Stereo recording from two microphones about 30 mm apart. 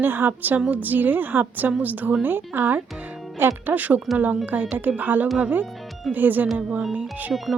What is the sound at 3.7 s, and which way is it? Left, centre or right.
Speech, right.